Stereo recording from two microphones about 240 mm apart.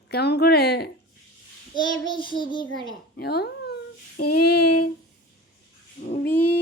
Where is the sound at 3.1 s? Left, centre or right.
Left.